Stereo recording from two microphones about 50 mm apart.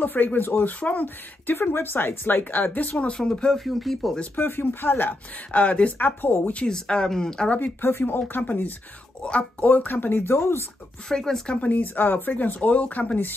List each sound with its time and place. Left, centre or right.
0.0 s a woman's voice: left
1.0 s a woman's voice: left
3.1 s speech: centre
3.5 s speech: centre
4.4 s speech: left
5.5 s speech: left
6.7 s speech: centre
7.8 s a woman's voice: left
9.2 s a woman's voice: left
11.1 s speech: centre
11.5 s a woman's voice: left